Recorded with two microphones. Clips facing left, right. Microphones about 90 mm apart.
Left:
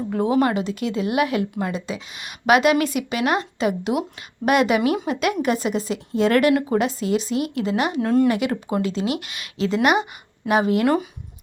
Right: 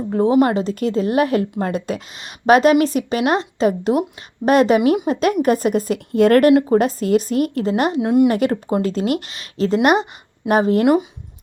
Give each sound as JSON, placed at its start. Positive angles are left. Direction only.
{"t": 0.1, "sound": "a woman's voice", "side_deg": -30}
{"t": 8.0, "sound": "speech", "side_deg": -15}
{"t": 8.3, "sound": "speech", "side_deg": -40}